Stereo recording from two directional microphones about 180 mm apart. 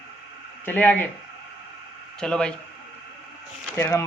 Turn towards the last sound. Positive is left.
turn(degrees=15)  # may be behind; listen again after turning